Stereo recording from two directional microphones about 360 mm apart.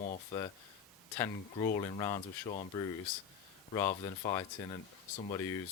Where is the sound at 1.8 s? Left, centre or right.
Centre.